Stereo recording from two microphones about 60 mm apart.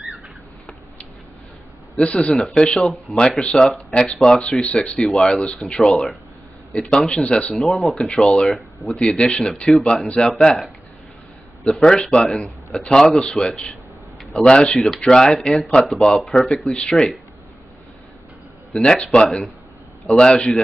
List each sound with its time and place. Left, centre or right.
2.0 s a man's voice: left
4.9 s a man's voice: centre; by 7.5 s left
7.5 s speech: centre
9.0 s speech: left
9.7 s a man's voice: centre
10.0 s speech: left
10.4 s a man's voice: centre
11.8 s a man's voice: centre
16.7 s speech: centre
18.7 s a man's voice: centre
20.1 s a man's voice: centre